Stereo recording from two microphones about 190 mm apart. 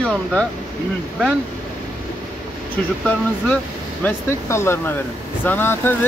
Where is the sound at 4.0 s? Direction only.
10° left (ahead or behind).